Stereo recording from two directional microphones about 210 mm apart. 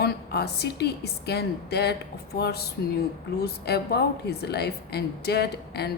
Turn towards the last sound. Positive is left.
turn(degrees=50)  # may be behind; listen again after turning